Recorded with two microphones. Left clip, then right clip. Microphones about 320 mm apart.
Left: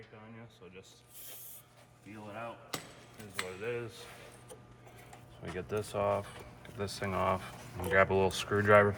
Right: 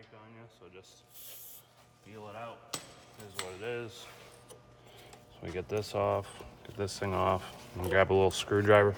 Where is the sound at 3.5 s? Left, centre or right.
Right.